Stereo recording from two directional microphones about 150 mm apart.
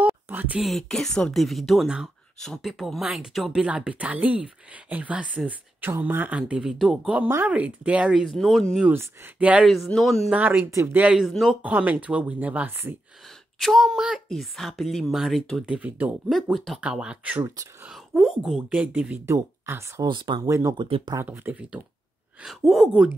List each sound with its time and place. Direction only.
0.0 s a sound: 10° right (ahead or behind)
0.6 s speech: centre (ahead or behind)
8.7 s speech: 10° right (ahead or behind)
10.3 s speech: 10° right (ahead or behind)
13.6 s speech: centre (ahead or behind)
19.2 s speech: 20° right (ahead or behind)
20.1 s speech: 30° right (ahead or behind)
21.2 s speech: 10° right (ahead or behind)